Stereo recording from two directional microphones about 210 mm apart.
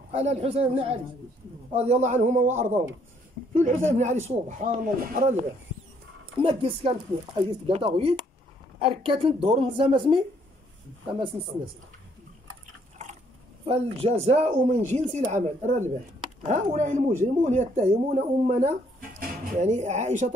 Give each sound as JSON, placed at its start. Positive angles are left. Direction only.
{"t": 0.1, "sound": "speech", "side_deg": -30}
{"t": 6.4, "sound": "speech", "side_deg": -25}
{"t": 13.7, "sound": "speech", "side_deg": -30}